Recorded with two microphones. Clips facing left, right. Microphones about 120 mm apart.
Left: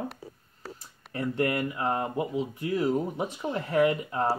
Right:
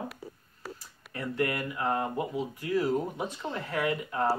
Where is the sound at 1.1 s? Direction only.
30° left (ahead or behind).